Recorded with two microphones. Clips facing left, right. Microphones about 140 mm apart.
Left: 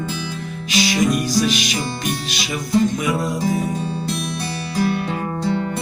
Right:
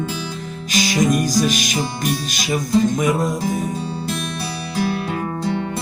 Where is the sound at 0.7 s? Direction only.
45° right (ahead or behind).